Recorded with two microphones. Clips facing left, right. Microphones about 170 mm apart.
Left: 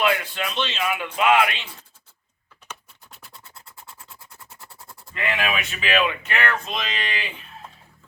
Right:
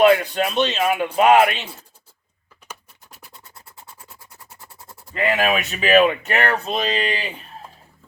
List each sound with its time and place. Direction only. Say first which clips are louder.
0.0 s speech: right 9 dB; 45° right (ahead or behind)
5.1 s speech: right 6 dB; 40° right (ahead or behind)